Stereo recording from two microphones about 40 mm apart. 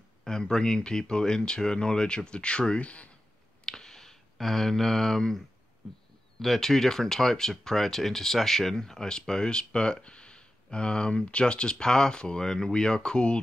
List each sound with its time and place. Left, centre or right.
0.2 s speech: centre; by 3.1 s left
3.6 s a sound: centre
6.4 s speech: centre; by 13.4 s left